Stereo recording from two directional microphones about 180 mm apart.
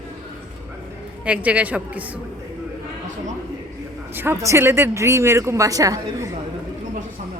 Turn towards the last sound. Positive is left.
turn(degrees=-20)  # may be behind; listen again after turning